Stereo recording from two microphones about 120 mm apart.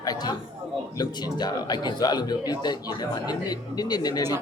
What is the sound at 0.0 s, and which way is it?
A man's voice, 35° left (ahead or behind).